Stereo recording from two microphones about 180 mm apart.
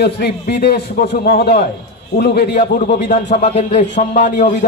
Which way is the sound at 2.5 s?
45° left (ahead or behind).